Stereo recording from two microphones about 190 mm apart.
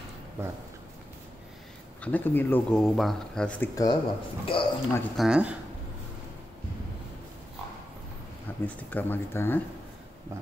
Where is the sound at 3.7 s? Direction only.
20° left (ahead or behind).